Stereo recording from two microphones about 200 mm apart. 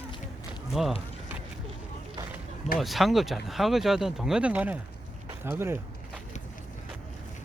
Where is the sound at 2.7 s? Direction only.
Centre (ahead or behind).